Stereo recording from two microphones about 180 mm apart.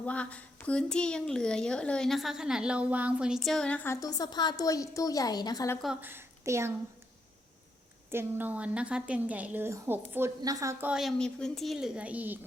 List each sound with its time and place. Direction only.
0.0 s a woman's voice: 5° left (ahead or behind)
4.0 s a woman's voice: 20° left (ahead or behind)
5.8 s a woman's voice: 5° right (ahead or behind)
8.1 s a woman's voice: 10° right (ahead or behind)